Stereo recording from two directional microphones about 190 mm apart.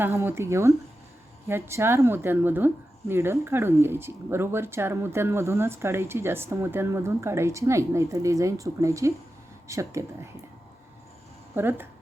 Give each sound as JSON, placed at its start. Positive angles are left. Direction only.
{"t": 0.0, "sound": "speech", "side_deg": -10}
{"t": 11.5, "sound": "speech", "side_deg": -10}